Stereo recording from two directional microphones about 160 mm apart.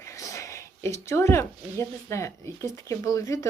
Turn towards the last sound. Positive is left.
turn(degrees=20)  # may be behind; listen again after turning